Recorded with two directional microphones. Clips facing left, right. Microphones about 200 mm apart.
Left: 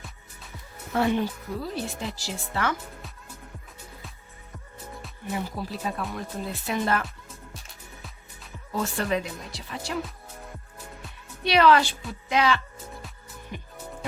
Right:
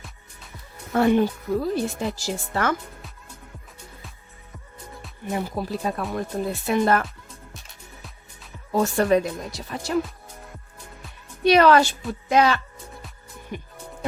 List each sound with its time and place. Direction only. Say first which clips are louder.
0.9 s a woman's voice: right 6 dB; 50° right (ahead or behind)
4.5 s music: left 1 dB; centre (ahead or behind)
5.3 s a woman's voice: right 5 dB; 45° right (ahead or behind)
8.7 s a woman's voice: right 8 dB; 45° right (ahead or behind)
11.4 s a woman's voice: right 4 dB; 45° right (ahead or behind)
13.5 s music: right 5 dB; 50° right (ahead or behind)